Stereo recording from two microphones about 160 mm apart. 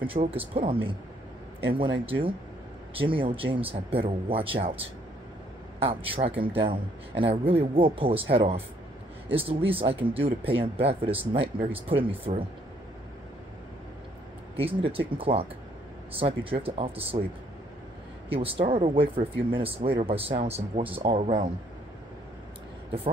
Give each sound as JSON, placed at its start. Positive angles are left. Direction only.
{"t": 0.0, "sound": "speech", "side_deg": -35}
{"t": 14.6, "sound": "speech", "side_deg": -35}
{"t": 18.3, "sound": "speech", "side_deg": -35}